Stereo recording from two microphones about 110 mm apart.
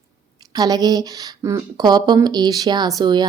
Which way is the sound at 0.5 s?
35° right (ahead or behind).